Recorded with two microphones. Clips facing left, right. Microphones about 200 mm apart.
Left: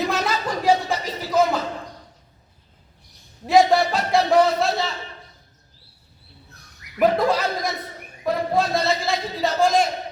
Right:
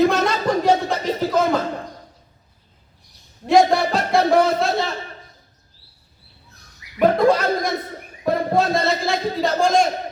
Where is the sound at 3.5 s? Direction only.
Centre (ahead or behind).